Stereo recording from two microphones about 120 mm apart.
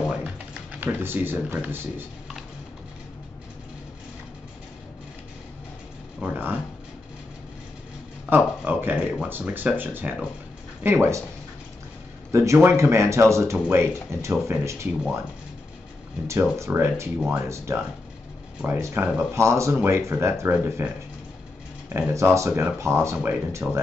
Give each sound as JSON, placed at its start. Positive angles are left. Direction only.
{"t": 0.0, "sound": "typing", "side_deg": -5}
{"t": 0.7, "sound": "speech", "side_deg": -15}
{"t": 6.2, "sound": "a sound", "side_deg": -15}
{"t": 8.3, "sound": "speech", "side_deg": -15}
{"t": 12.3, "sound": "speech", "side_deg": -25}
{"t": 16.5, "sound": "speech", "side_deg": -25}
{"t": 18.8, "sound": "speech", "side_deg": -20}